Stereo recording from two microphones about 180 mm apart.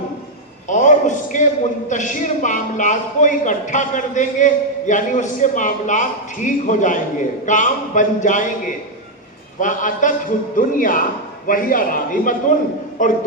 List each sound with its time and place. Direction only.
0.7 s a sound: 45° left (ahead or behind)
1.9 s a man's voice: 45° left (ahead or behind)
9.6 s a man's voice: 45° left (ahead or behind)